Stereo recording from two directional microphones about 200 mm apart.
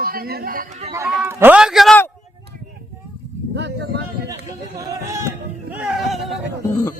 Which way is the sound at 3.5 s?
60° right (ahead or behind).